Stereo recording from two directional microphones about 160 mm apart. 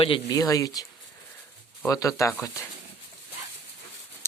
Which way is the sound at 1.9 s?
20° left (ahead or behind).